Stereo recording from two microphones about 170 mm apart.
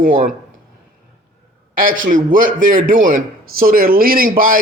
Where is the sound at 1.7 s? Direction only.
55° right (ahead or behind).